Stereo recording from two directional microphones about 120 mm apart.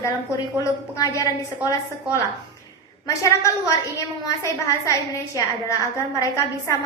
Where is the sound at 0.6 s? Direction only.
25° left (ahead or behind).